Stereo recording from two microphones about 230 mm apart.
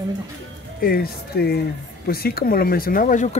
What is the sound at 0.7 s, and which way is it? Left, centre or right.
Speech, left.